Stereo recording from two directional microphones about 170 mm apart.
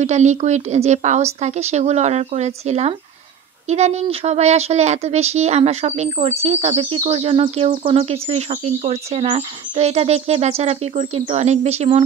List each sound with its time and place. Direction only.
0.0 s speech: 40° right (ahead or behind)